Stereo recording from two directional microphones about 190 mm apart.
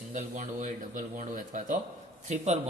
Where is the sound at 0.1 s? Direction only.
40° right (ahead or behind).